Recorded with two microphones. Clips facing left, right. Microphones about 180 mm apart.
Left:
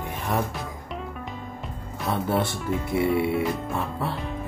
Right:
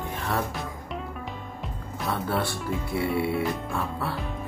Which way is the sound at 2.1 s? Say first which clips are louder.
Left 3 dB; 20° left (ahead or behind).